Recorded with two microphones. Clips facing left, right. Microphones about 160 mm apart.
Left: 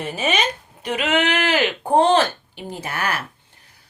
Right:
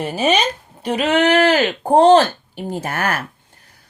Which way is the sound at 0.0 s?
35° right (ahead or behind).